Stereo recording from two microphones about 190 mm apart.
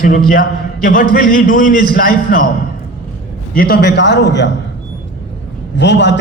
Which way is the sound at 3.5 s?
55° left (ahead or behind).